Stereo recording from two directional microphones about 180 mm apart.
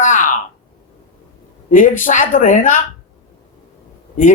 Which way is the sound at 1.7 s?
45° left (ahead or behind).